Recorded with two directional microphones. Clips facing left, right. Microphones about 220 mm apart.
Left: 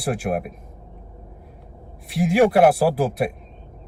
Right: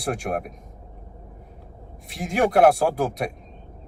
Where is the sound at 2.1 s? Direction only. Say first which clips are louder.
Left 4 dB; 5° left (ahead or behind).